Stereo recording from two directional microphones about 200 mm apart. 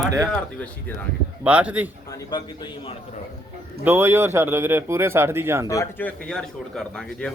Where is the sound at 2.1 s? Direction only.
20° left (ahead or behind).